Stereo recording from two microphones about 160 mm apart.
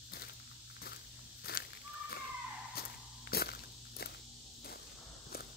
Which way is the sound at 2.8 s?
70° left (ahead or behind).